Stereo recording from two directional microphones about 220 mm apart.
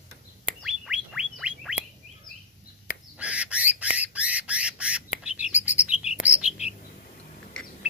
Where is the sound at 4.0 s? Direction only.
5° right (ahead or behind).